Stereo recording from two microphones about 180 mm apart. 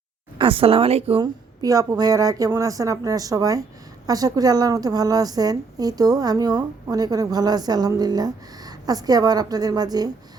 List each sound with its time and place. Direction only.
0.3 s speech: 30° right (ahead or behind)
1.2 s a woman's voice: 20° right (ahead or behind)